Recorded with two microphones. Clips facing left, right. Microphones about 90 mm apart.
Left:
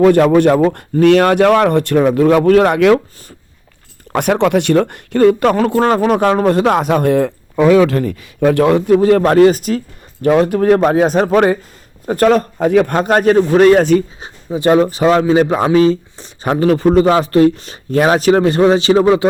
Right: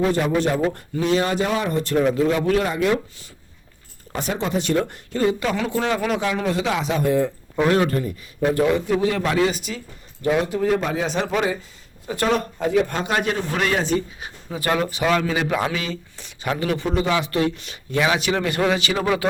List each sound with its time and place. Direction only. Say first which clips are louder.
0.0 s speech: left 11 dB; 75° left (ahead or behind)
4.1 s speech: left 11 dB; 70° left (ahead or behind)
7.9 s speech: left 7 dB; 85° left; by 9.0 s 70° left (ahead or behind)
9.0 s a man's voice: left 11 dB; 50° left (ahead or behind)
10.2 s a man's voice: left 9 dB; 60° left (ahead or behind); by 13.8 s 40° left (ahead or behind)
14.2 s speech: left 10 dB; 25° left (ahead or behind)